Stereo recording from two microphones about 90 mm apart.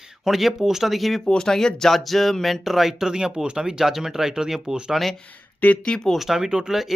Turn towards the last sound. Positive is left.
turn(degrees=-5)  # may be behind; listen again after turning